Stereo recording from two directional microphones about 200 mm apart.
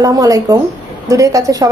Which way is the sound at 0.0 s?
15° right (ahead or behind).